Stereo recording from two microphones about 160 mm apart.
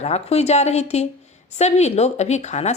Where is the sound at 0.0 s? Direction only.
40° left (ahead or behind).